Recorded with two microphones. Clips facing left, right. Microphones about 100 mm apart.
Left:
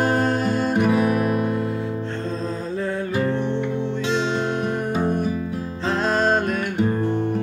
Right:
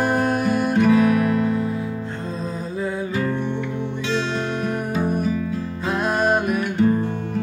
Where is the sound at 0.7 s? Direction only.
10° left (ahead or behind).